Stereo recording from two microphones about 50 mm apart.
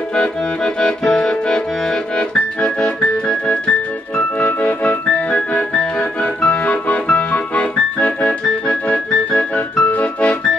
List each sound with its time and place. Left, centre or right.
0.7 s accordion: centre
2.1 s music: left
4.4 s music: left
5.8 s accordion: centre
6.5 s music: left